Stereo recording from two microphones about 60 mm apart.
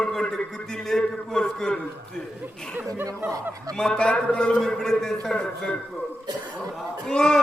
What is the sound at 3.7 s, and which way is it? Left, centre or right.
A man's voice, centre.